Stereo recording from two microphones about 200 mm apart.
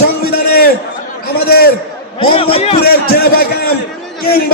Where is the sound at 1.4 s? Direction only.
50° left (ahead or behind).